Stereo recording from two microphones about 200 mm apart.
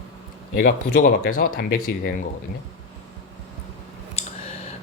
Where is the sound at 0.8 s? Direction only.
40° left (ahead or behind).